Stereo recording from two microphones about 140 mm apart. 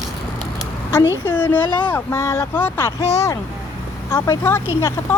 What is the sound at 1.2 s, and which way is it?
Speech, 10° left (ahead or behind).